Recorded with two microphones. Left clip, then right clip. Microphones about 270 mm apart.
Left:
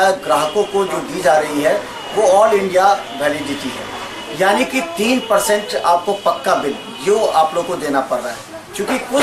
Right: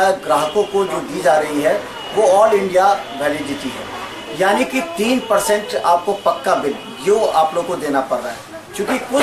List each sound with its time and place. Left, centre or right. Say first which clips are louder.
0.0 s a man's voice: left 1 dB; centre
4.4 s speech: left 1 dB; centre
5.9 s speech: even; centre
6.4 s a man's voice: left 1 dB; centre